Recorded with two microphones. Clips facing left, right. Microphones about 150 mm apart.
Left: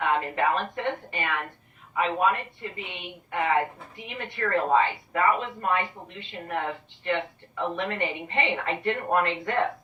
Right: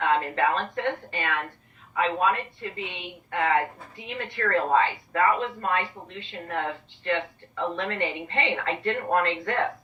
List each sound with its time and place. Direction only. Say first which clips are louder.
0.0 s speech: right 1 dB; 15° left (ahead or behind)